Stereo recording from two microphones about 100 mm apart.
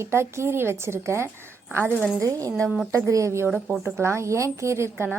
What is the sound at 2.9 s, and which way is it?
Speech, 30° right (ahead or behind).